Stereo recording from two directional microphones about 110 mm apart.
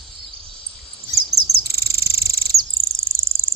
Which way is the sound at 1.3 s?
30° right (ahead or behind).